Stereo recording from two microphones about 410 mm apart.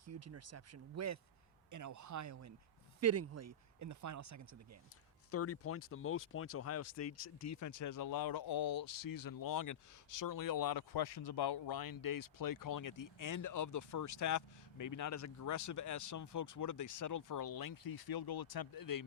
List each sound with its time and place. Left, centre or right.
0.0 s speech: right
5.3 s speech: left